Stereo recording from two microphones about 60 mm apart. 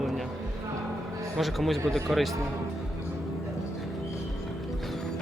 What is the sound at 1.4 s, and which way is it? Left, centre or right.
Speech, centre.